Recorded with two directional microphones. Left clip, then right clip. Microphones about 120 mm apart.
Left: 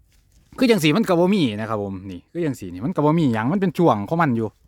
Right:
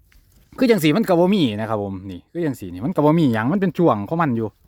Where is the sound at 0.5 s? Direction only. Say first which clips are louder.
Right 1 dB; centre (ahead or behind).